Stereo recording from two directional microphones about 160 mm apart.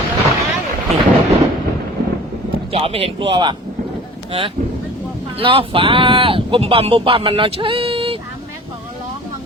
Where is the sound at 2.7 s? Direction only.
35° right (ahead or behind).